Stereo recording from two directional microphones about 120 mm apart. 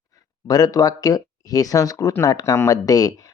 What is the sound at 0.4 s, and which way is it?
Speech, 30° left (ahead or behind).